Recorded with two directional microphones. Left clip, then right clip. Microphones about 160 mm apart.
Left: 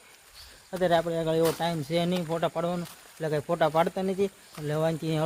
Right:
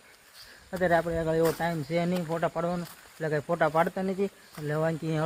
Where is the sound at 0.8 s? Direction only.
Centre (ahead or behind).